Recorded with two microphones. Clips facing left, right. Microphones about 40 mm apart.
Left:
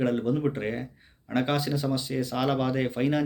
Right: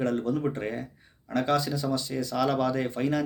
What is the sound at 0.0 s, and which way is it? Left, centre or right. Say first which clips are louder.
Speech: left 1 dB; left.